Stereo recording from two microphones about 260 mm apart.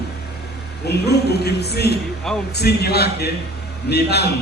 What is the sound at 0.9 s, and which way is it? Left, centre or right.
A man's voice, left.